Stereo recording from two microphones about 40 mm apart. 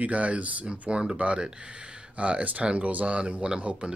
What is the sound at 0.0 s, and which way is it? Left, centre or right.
Speech, right.